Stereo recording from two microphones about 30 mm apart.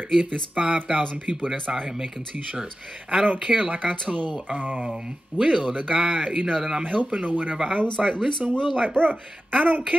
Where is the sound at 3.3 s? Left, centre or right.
Right.